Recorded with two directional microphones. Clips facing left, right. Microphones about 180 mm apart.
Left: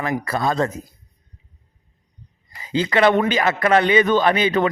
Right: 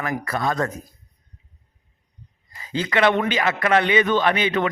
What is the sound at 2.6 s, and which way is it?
Speech, 25° left (ahead or behind).